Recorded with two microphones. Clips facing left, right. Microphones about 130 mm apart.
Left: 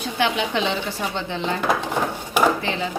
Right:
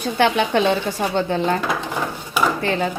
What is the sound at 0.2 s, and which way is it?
Speech, 55° right (ahead or behind).